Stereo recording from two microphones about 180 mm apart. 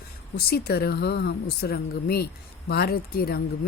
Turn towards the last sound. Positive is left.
turn(degrees=60)  # may be behind; listen again after turning